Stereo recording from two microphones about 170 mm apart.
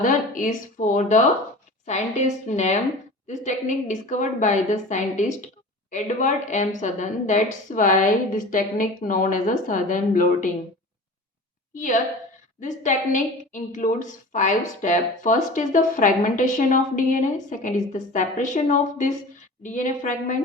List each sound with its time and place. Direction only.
0.0 s a woman's voice: 50° left (ahead or behind)
11.7 s a woman's voice: 50° left (ahead or behind)